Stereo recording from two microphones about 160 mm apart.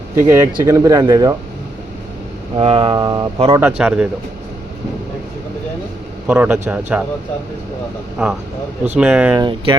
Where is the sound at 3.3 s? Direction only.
35° right (ahead or behind).